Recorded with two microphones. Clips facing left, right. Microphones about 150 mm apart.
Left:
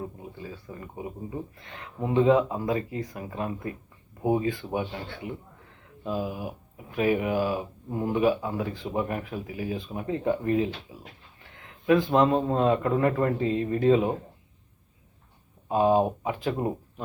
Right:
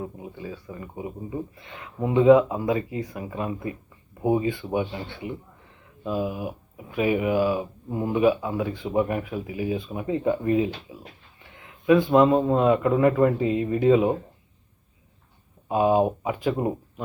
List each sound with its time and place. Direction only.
0.2 s speech: 15° right (ahead or behind)
11.9 s a man's voice: 5° right (ahead or behind)
15.7 s a man's voice: 5° right (ahead or behind)